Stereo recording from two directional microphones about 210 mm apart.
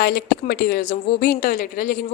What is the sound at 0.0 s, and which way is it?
A woman's voice, 45° left (ahead or behind).